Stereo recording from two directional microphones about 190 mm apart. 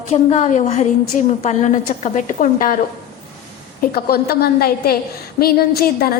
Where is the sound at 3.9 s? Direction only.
55° left (ahead or behind).